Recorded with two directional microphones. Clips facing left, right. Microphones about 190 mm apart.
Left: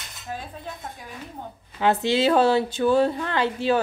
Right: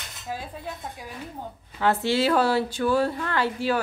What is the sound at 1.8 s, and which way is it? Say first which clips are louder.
A woman's voice: left 2 dB; 20° left (ahead or behind).